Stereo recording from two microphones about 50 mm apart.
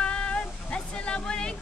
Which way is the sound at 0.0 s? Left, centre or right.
Left.